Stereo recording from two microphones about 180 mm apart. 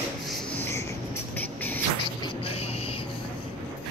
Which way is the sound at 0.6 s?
15° left (ahead or behind).